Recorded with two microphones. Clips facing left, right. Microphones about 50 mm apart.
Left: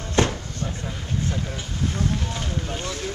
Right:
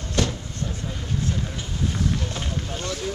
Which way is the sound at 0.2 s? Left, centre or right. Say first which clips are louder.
Left 4 dB; left.